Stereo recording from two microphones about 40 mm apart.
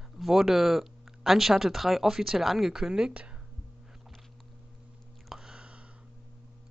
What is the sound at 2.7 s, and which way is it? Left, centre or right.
Speech, centre.